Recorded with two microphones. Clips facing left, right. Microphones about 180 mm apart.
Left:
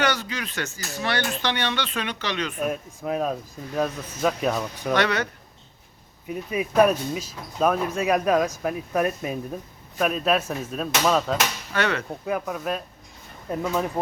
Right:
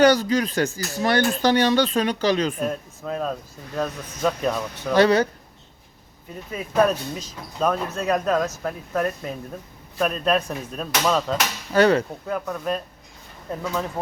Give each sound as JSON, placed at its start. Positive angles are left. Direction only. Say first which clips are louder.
{"t": 0.0, "sound": "speech", "louder": "right 9 dB", "side_deg": -35}
{"t": 3.0, "sound": "speech", "louder": "left 2 dB", "side_deg": 15}
{"t": 4.9, "sound": "speech", "louder": "right 7 dB", "side_deg": -35}
{"t": 6.2, "sound": "speech", "louder": "left 5 dB", "side_deg": 10}
{"t": 11.7, "sound": "speech", "louder": "right 10 dB", "side_deg": -35}
{"t": 12.2, "sound": "speech", "louder": "even", "side_deg": 10}